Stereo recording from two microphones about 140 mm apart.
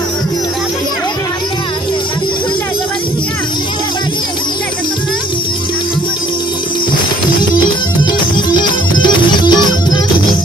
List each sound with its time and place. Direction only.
7.2 s music: 35° left (ahead or behind)